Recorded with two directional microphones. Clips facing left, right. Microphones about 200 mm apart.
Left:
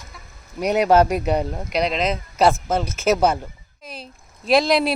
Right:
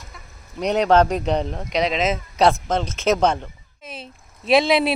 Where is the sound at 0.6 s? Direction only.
10° left (ahead or behind).